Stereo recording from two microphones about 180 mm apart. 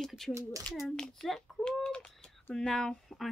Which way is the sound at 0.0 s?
Centre (ahead or behind).